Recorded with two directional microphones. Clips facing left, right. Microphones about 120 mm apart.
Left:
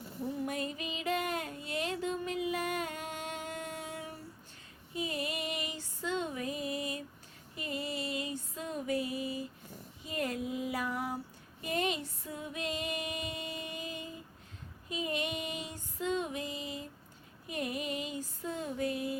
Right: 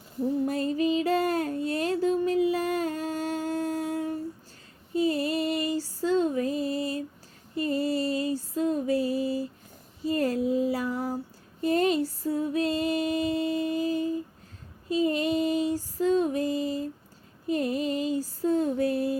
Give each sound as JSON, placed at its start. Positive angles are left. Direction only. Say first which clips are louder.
{"t": 0.4, "sound": "a sound", "louder": "right 11 dB", "side_deg": -35}
{"t": 4.9, "sound": "female singing", "louder": "right 11 dB", "side_deg": -35}
{"t": 7.5, "sound": "music", "louder": "right 12 dB", "side_deg": -35}
{"t": 10.0, "sound": "child singing", "louder": "right 10 dB", "side_deg": -35}
{"t": 11.6, "sound": "female singing", "louder": "right 10 dB", "side_deg": -35}
{"t": 17.4, "sound": "a sound", "louder": "right 10 dB", "side_deg": -35}